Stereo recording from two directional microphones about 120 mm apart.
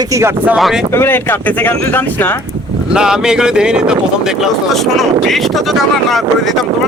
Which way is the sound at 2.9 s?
5° right (ahead or behind).